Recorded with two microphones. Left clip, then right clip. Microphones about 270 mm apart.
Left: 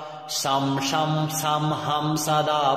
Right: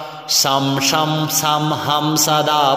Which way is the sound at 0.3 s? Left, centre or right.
Right.